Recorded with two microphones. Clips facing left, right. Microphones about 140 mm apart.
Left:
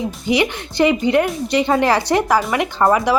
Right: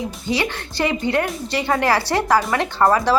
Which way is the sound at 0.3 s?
15° left (ahead or behind).